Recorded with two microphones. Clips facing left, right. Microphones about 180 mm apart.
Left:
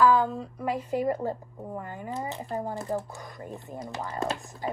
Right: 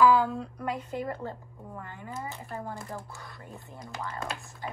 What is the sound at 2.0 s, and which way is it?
Speech, 20° left (ahead or behind).